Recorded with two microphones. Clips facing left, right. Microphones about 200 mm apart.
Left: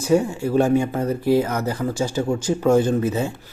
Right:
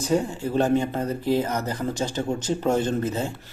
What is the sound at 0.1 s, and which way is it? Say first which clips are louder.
Speech: left 6 dB; 10° left (ahead or behind).